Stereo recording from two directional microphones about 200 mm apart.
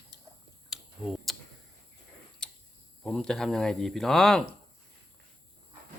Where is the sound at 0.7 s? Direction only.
Centre (ahead or behind).